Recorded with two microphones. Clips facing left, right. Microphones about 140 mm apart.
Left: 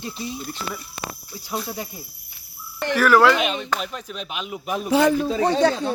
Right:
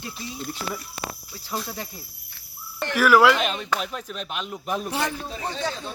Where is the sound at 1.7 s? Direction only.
15° left (ahead or behind).